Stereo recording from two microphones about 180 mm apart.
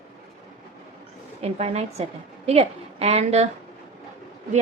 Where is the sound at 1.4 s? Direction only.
35° right (ahead or behind).